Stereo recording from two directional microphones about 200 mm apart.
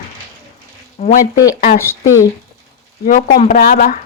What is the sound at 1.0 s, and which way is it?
Speech, 35° left (ahead or behind).